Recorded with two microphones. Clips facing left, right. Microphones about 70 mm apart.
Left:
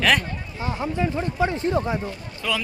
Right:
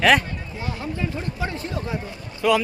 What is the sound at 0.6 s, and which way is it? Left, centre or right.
Speech, left.